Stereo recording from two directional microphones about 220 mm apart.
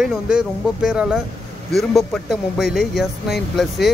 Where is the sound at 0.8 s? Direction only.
5° right (ahead or behind).